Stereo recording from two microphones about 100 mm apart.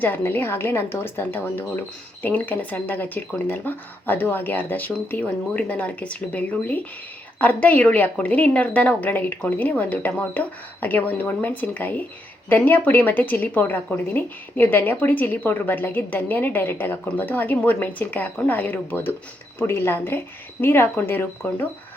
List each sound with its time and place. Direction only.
0.0 s speech: 20° left (ahead or behind)